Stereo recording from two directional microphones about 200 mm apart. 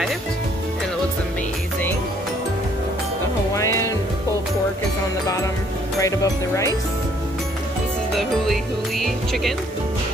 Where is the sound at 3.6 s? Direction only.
15° left (ahead or behind).